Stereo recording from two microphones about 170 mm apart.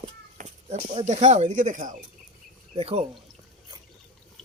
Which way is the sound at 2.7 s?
35° right (ahead or behind).